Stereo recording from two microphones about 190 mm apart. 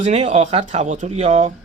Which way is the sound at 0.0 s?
35° right (ahead or behind).